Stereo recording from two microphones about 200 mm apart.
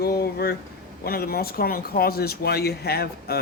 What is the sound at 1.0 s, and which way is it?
Speech, 50° left (ahead or behind).